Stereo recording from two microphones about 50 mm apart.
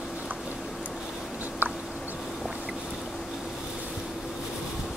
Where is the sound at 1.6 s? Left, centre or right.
Right.